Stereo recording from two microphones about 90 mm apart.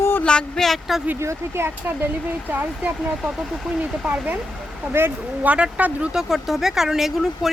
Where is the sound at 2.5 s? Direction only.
15° right (ahead or behind).